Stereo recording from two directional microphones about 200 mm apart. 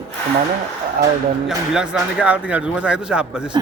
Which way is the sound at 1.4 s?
Centre (ahead or behind).